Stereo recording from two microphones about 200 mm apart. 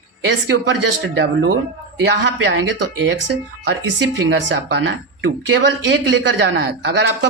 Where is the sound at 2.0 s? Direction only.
60° right (ahead or behind).